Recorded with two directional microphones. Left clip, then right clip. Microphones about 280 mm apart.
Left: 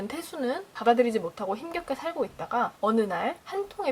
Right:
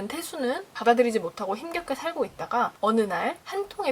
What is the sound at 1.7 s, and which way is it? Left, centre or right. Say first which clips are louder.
A woman's voice: right 2 dB; centre.